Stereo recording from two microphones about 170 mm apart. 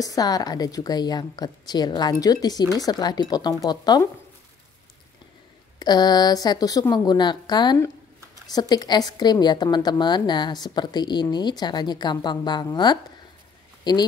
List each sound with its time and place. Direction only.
0.0 s a woman's voice: 20° left (ahead or behind)
5.8 s a woman's voice: 25° left (ahead or behind)